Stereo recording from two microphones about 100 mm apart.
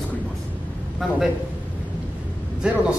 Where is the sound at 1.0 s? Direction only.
5° right (ahead or behind).